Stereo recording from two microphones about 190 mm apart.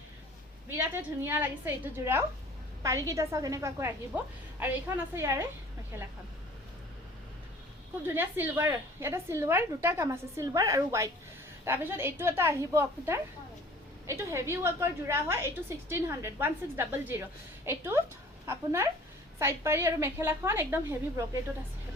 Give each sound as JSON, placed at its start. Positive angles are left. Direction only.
{"t": 0.9, "sound": "a woman's voice", "side_deg": -10}
{"t": 8.0, "sound": "a woman's voice", "side_deg": -10}